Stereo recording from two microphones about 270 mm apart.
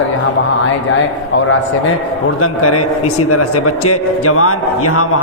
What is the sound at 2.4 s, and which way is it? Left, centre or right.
A man's voice, left.